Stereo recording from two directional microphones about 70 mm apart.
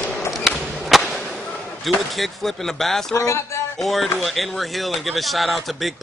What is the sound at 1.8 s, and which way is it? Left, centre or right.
Speech, centre.